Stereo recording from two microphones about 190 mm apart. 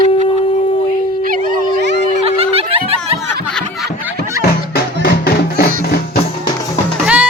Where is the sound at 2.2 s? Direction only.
30° right (ahead or behind).